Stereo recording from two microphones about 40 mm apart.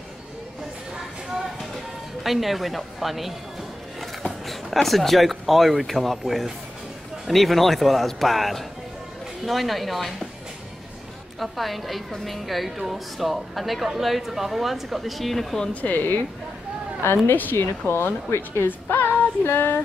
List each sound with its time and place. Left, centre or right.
2.2 s a woman's voice: centre
4.8 s a woman's voice: centre
11.3 s a woman's voice: centre
15.7 s a woman's voice: left
17.3 s a woman's voice: left
18.9 s female singing: left